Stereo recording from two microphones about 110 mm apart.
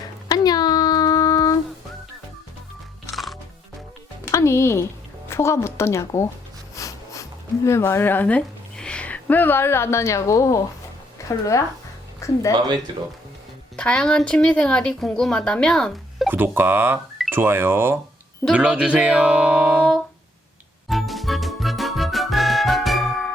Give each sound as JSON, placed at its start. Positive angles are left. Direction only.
{"t": 0.3, "sound": "a sound", "side_deg": 35}
{"t": 4.3, "sound": "music", "side_deg": 25}
{"t": 5.3, "sound": "a woman's voice", "side_deg": 25}
{"t": 6.7, "sound": "a sound", "side_deg": 30}
{"t": 12.2, "sound": "speech", "side_deg": 30}
{"t": 12.9, "sound": "speech", "side_deg": -45}
{"t": 13.7, "sound": "speech", "side_deg": 10}
{"t": 16.3, "sound": "speech", "side_deg": -20}
{"t": 20.9, "sound": "music", "side_deg": 0}